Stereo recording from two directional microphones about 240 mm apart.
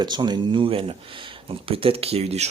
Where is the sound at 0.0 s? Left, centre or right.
Centre.